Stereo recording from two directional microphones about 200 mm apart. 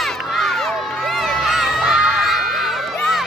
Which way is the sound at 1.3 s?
Centre (ahead or behind).